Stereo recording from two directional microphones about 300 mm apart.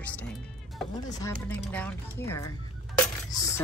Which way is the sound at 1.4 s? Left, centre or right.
Centre.